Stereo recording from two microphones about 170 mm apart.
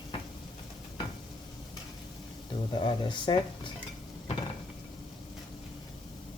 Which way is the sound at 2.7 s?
25° left (ahead or behind).